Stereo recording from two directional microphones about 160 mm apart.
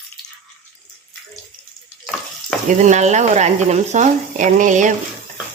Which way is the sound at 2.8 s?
45° right (ahead or behind).